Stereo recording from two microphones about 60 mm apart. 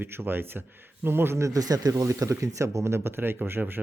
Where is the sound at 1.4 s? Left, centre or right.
Right.